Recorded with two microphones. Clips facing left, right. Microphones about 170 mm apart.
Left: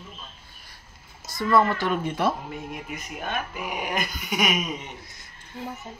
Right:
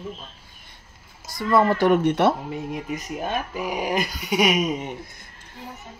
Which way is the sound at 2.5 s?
35° right (ahead or behind).